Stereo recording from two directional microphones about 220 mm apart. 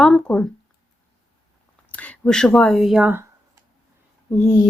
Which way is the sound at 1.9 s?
5° left (ahead or behind).